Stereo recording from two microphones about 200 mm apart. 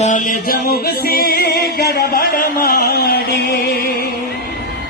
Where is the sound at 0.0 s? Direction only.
40° left (ahead or behind).